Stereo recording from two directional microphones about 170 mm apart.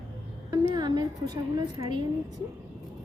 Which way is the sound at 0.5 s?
25° right (ahead or behind).